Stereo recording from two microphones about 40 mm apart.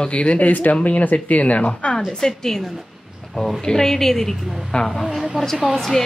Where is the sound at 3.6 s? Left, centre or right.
Centre.